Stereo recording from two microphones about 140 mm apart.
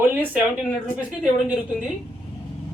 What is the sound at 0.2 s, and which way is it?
Speech, 10° right (ahead or behind).